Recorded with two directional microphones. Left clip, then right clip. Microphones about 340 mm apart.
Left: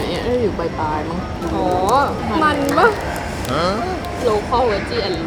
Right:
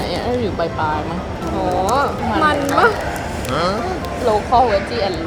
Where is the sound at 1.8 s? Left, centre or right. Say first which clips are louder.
Left 1 dB; centre.